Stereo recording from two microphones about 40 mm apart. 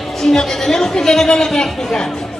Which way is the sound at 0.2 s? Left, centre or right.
Centre.